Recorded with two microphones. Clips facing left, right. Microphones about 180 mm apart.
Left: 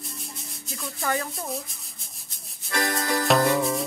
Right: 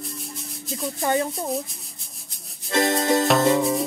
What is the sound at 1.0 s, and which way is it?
Speech, 25° right (ahead or behind).